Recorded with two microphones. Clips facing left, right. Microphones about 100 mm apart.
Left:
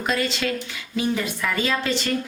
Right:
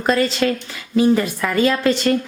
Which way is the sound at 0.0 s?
40° right (ahead or behind).